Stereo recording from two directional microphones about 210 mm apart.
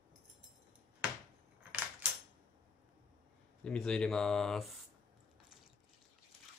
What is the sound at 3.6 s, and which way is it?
Speech, 5° left (ahead or behind).